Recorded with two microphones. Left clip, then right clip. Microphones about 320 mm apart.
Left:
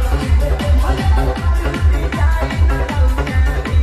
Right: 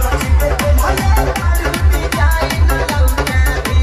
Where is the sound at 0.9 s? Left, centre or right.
Right.